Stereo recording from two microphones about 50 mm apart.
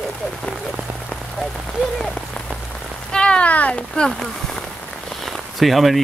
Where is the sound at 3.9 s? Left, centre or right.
Centre.